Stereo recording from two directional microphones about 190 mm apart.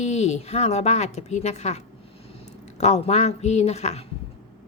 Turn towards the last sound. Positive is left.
turn(degrees=35)  # may be behind; listen again after turning